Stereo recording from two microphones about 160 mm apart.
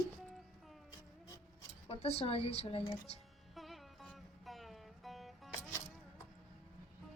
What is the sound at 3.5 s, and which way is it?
Music, centre (ahead or behind).